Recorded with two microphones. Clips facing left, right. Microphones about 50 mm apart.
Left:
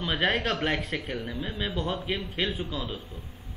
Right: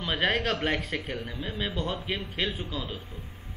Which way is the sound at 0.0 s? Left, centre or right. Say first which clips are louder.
Even; centre.